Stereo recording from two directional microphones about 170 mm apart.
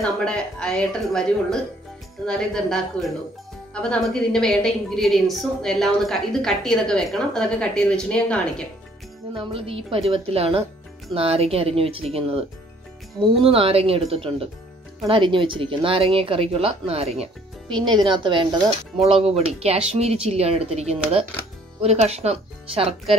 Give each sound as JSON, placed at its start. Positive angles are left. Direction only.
{"t": 0.0, "sound": "a woman's voice", "side_deg": 5}
{"t": 9.3, "sound": "speech", "side_deg": -30}